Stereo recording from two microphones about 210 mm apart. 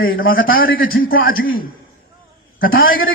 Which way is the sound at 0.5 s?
45° left (ahead or behind).